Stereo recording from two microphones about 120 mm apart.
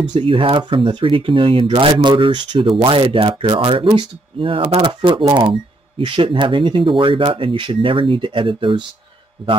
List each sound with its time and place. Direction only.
0.0 s speech: 40° right (ahead or behind)